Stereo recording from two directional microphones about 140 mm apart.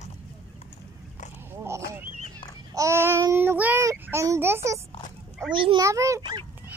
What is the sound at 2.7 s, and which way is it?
A child's voice, 20° right (ahead or behind).